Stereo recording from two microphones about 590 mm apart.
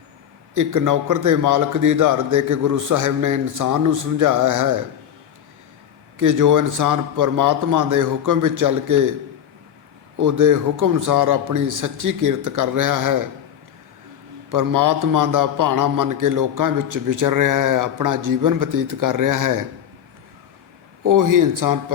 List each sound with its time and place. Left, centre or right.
0.5 s a man's voice: right
6.1 s a man's voice: right
10.2 s a man's voice: right
14.5 s a man's voice: right
21.0 s a man's voice: right